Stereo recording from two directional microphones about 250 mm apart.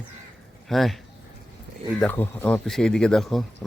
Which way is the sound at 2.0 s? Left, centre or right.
Centre.